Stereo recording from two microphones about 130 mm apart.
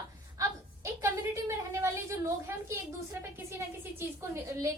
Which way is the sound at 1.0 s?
20° right (ahead or behind).